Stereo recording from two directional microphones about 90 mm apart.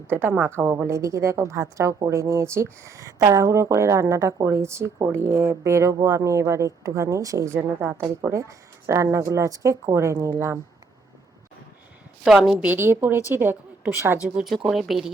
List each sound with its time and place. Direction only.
0.1 s speech: 25° right (ahead or behind)
12.2 s speech: 5° right (ahead or behind)
12.6 s a woman's voice: 25° right (ahead or behind)
14.7 s speech: centre (ahead or behind)